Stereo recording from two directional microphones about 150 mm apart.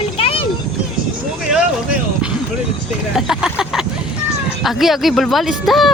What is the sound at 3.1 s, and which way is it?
Vehicle, 5° right (ahead or behind).